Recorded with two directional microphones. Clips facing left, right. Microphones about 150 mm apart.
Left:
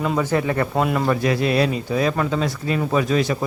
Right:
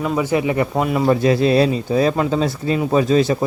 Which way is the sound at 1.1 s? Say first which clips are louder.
Right 5 dB; 30° right (ahead or behind).